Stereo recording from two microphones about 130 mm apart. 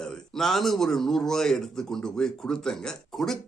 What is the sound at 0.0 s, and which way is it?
A man's voice, 5° left (ahead or behind).